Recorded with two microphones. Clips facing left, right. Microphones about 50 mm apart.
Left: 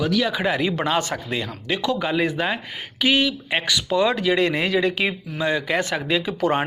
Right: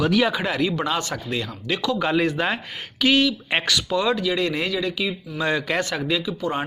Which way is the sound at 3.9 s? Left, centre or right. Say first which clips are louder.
Left 3 dB; left.